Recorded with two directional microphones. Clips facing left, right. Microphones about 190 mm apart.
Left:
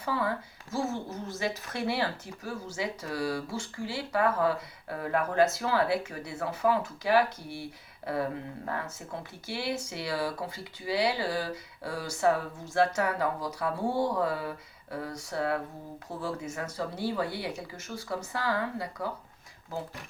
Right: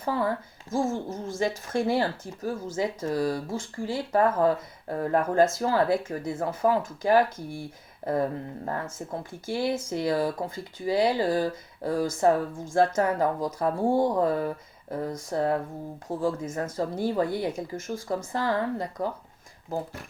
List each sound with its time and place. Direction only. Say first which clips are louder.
0.0 s speech: right 4 dB; 45° right (ahead or behind)